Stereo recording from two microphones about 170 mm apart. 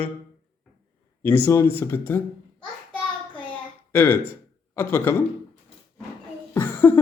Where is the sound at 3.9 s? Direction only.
10° left (ahead or behind).